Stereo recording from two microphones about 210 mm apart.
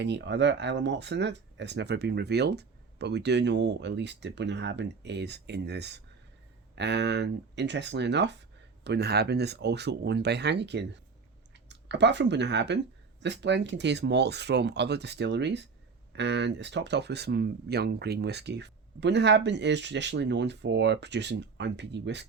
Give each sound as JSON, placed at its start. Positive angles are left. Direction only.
{"t": 0.0, "sound": "speech", "side_deg": -55}